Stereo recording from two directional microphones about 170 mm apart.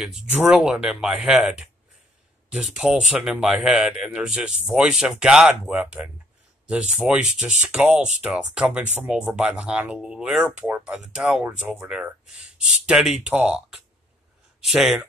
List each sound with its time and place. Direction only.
0.0 s speech: 5° right (ahead or behind)